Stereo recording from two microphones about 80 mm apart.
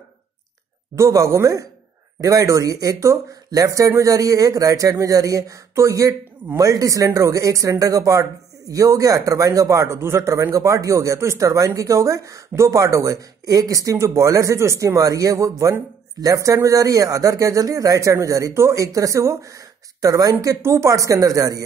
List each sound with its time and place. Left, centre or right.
0.9 s speech: right